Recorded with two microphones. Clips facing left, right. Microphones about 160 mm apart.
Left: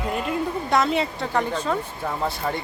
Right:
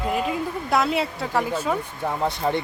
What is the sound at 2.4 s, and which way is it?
Speech, 20° right (ahead or behind).